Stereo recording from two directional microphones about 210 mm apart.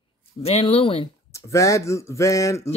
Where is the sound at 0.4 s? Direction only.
30° left (ahead or behind).